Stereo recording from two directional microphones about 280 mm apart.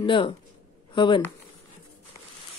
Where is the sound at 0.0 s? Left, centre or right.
Centre.